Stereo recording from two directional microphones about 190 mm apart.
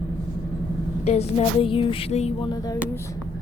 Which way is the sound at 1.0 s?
35° left (ahead or behind).